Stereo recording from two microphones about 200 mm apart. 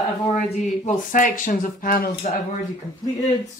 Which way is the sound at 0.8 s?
40° left (ahead or behind).